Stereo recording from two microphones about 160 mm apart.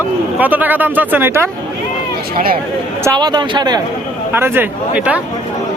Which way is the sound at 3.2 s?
25° right (ahead or behind).